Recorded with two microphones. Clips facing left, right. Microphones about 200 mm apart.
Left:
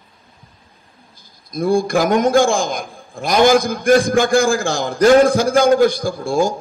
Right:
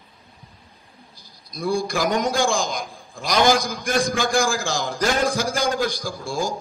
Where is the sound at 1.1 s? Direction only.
50° left (ahead or behind).